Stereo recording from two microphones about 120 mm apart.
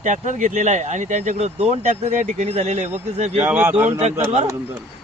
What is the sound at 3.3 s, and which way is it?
Speech, 15° right (ahead or behind).